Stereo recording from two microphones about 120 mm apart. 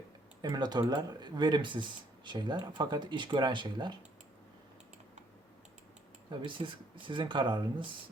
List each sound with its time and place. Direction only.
0.4 s speech: 35° right (ahead or behind)
6.4 s speech: 45° right (ahead or behind)